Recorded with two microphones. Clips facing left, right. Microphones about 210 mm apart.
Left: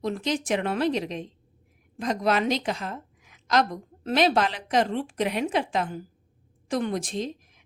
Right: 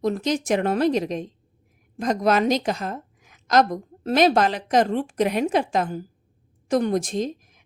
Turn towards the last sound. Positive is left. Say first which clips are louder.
# right 5 dB
turn(degrees=-45)  # may be behind; listen again after turning